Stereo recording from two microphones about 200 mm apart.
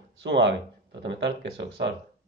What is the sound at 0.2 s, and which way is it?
Speech, 60° right (ahead or behind).